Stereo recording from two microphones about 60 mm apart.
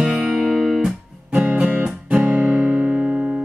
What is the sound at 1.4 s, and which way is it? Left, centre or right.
Music, right.